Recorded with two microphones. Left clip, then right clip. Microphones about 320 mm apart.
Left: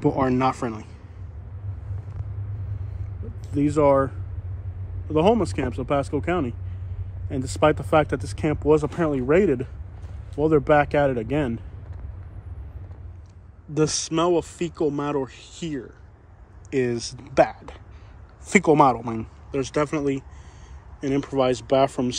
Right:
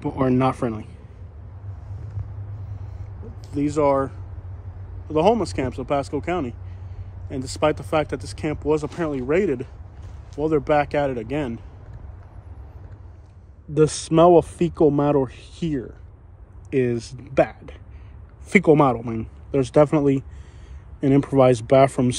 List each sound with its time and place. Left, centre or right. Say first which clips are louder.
0.2 s speech: right 1 dB; centre
3.4 s speech: left 1 dB; centre
13.7 s speech: right 6 dB; centre
19.5 s speech: right 7 dB; centre; by 22.1 s right